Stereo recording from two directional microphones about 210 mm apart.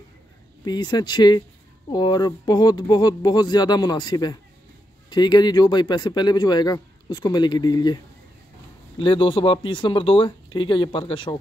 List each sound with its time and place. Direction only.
0.7 s a man's voice: 20° left (ahead or behind)
9.0 s a man's voice: 25° left (ahead or behind)